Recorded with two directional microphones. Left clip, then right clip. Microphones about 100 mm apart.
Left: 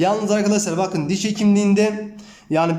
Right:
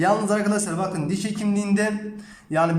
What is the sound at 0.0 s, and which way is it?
A man's voice, 20° left (ahead or behind).